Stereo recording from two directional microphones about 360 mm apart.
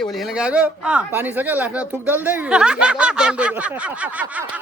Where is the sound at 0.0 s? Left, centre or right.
Centre.